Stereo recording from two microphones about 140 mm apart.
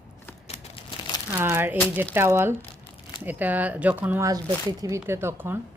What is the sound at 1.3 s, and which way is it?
A woman's voice, 15° right (ahead or behind).